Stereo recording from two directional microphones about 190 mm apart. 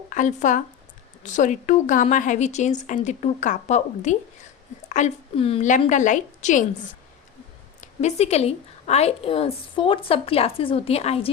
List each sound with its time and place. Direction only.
0.1 s a woman's voice: 40° left (ahead or behind)
7.8 s a woman's voice: 35° left (ahead or behind)